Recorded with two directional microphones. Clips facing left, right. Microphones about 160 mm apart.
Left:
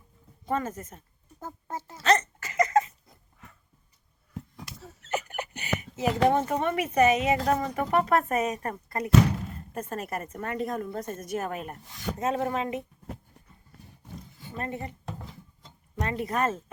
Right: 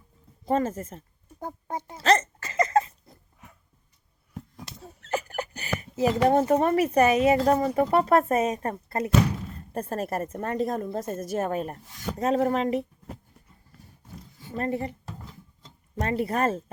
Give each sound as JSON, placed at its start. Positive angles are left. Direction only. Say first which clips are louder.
{"t": 0.4, "sound": "speech", "louder": "right 5 dB", "side_deg": -30}
{"t": 2.0, "sound": "hiccup", "louder": "right 2 dB", "side_deg": -30}
{"t": 5.0, "sound": "hiccup", "louder": "right 2 dB", "side_deg": -35}
{"t": 6.5, "sound": "a woman's voice", "louder": "right 6 dB", "side_deg": -35}
{"t": 14.5, "sound": "a woman's voice", "louder": "right 6 dB", "side_deg": -35}
{"t": 16.0, "sound": "a woman's voice", "louder": "right 3 dB", "side_deg": -35}